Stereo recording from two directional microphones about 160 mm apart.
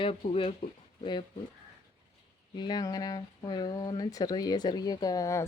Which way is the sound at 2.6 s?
25° left (ahead or behind).